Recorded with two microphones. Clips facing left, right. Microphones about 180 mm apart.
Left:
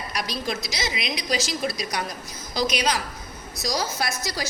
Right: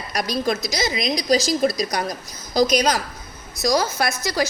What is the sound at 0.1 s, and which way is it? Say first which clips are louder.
A woman's voice: right 8 dB; 45° right (ahead or behind).